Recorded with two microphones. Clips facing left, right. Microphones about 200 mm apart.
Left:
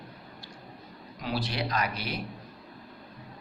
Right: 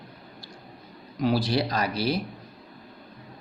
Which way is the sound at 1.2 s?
40° right (ahead or behind).